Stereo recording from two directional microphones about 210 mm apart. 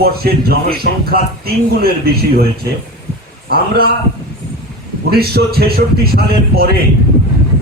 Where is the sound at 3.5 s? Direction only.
45° right (ahead or behind).